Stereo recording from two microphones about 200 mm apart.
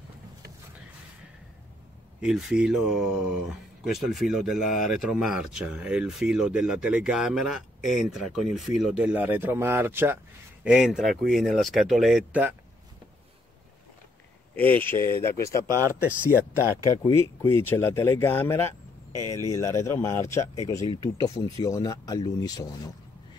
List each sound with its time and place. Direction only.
2.2 s speech: 5° right (ahead or behind)
14.5 s speech: 10° left (ahead or behind)
16.0 s speech: 5° right (ahead or behind)
16.8 s speech: 20° left (ahead or behind)